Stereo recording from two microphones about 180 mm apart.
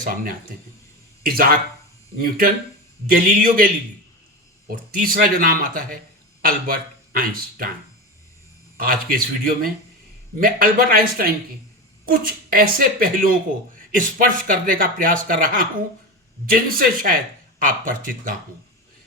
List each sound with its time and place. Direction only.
0.0 s speech: 50° right (ahead or behind)
4.7 s speech: 50° right (ahead or behind)
8.8 s speech: 55° right (ahead or behind)